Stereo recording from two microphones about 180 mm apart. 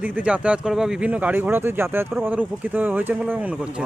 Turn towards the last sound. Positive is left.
turn(degrees=-5)  # may be behind; listen again after turning